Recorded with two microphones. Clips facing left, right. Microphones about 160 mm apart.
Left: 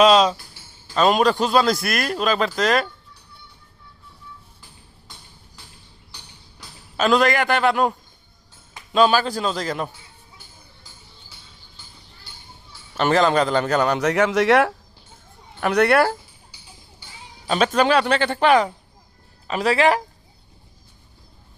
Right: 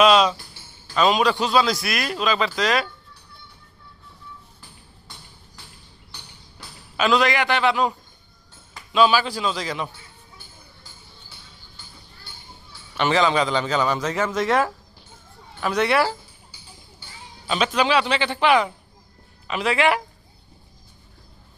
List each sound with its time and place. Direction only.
0.0 s speech: 35° left (ahead or behind)
0.9 s a man's voice: 45° left (ahead or behind)
6.9 s a man's voice: 45° left (ahead or behind)
13.0 s a man's voice: 45° left (ahead or behind)
17.4 s a man's voice: 45° left (ahead or behind)